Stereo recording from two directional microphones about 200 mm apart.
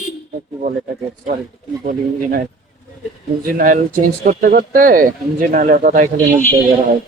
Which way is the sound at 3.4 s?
45° right (ahead or behind).